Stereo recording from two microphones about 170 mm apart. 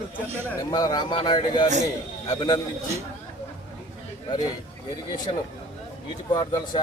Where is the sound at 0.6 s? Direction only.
25° left (ahead or behind).